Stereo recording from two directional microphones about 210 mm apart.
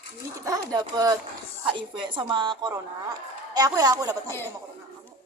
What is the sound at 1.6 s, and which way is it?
A woman's voice, 25° right (ahead or behind).